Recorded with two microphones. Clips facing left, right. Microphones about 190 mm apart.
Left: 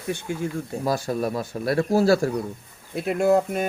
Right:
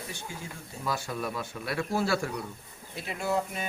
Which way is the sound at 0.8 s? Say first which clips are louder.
Left 7 dB; 40° left (ahead or behind).